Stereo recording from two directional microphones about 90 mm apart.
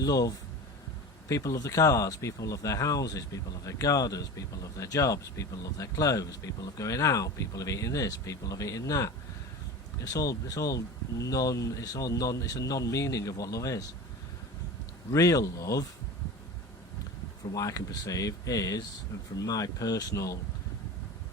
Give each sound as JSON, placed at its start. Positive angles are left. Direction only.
{"t": 0.0, "sound": "speech", "side_deg": 45}
{"t": 15.1, "sound": "speech", "side_deg": 40}
{"t": 17.5, "sound": "speech", "side_deg": 40}